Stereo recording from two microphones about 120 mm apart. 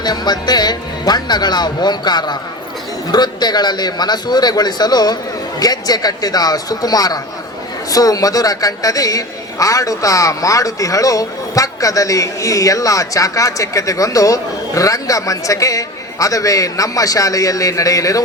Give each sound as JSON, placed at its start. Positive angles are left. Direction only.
{"t": 0.0, "sound": "a woman's voice", "side_deg": 35}